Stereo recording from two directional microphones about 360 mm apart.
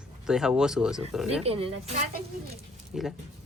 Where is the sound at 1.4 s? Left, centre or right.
Centre.